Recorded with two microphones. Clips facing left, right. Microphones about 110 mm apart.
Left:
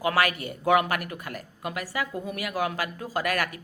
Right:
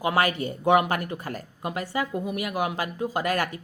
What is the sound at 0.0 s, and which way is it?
Speech, 25° right (ahead or behind).